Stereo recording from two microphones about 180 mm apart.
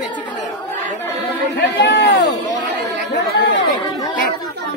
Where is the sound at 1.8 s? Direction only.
75° left (ahead or behind).